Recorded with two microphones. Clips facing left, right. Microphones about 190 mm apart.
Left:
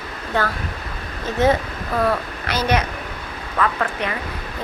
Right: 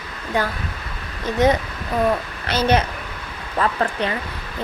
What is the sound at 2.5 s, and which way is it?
Speech, 30° right (ahead or behind).